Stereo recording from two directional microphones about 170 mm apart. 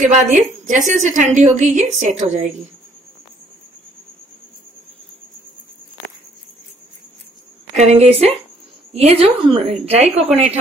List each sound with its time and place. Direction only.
0.0 s a woman's voice: 50° right (ahead or behind)
7.7 s a woman's voice: 40° right (ahead or behind)